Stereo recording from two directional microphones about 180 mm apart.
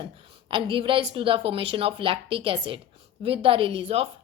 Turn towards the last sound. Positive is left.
turn(degrees=-35)  # may be behind; listen again after turning